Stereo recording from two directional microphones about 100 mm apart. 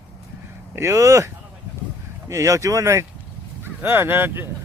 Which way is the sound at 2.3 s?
30° right (ahead or behind).